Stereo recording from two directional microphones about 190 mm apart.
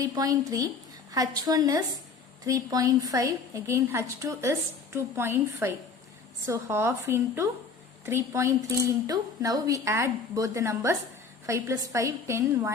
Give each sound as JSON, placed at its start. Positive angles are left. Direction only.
{"t": 0.0, "sound": "a woman's voice", "side_deg": -20}